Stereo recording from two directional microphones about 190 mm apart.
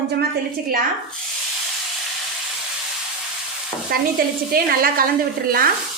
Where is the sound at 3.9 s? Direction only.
50° right (ahead or behind).